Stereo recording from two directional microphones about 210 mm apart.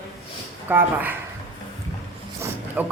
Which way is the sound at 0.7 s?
10° right (ahead or behind).